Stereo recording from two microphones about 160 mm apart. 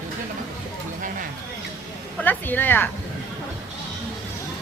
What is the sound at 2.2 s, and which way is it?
Speech, 10° left (ahead or behind).